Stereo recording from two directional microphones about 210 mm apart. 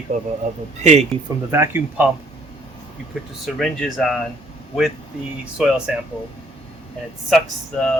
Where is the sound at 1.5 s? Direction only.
10° right (ahead or behind).